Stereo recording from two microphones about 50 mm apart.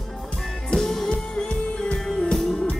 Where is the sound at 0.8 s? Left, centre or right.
Centre.